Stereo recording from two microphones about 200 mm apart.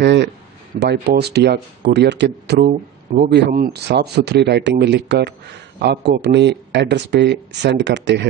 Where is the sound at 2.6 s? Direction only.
40° right (ahead or behind).